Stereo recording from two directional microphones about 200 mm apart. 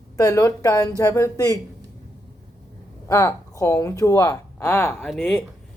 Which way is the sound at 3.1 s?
15° left (ahead or behind).